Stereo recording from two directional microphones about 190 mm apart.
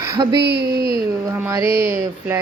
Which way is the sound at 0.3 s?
60° right (ahead or behind).